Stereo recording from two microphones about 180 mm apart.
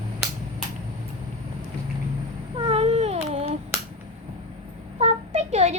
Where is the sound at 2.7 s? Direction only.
35° right (ahead or behind).